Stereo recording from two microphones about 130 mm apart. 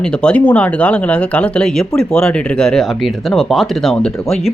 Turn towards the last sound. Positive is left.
turn(degrees=5)  # may be behind; listen again after turning